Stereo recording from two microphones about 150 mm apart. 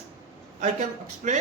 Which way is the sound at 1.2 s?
55° right (ahead or behind).